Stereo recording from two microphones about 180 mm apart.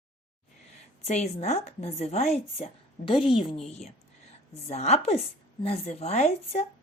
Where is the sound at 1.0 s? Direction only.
35° left (ahead or behind).